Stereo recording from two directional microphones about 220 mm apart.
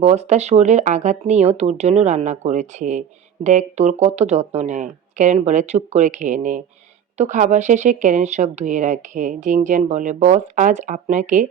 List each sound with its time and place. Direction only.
0.0 s speech: 30° right (ahead or behind)